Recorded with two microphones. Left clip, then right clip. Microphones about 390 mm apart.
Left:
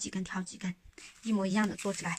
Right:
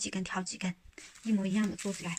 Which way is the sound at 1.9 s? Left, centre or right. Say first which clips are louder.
Left 3 dB; left.